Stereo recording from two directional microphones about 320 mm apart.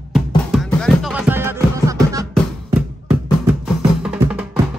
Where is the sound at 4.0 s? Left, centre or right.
Centre.